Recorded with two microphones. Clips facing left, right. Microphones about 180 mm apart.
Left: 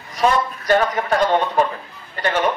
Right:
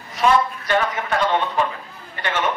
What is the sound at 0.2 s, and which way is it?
Speech, 40° left (ahead or behind).